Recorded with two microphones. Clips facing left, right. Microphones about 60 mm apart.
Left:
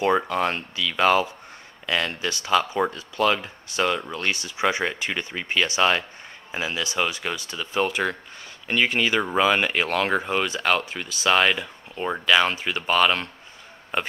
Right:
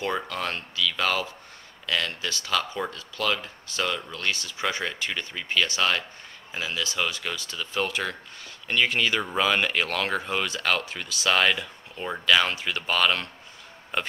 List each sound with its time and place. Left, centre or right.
0.0 s speech: left